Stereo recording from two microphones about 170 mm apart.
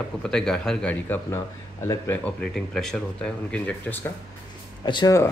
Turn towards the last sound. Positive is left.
turn(degrees=20)  # may be behind; listen again after turning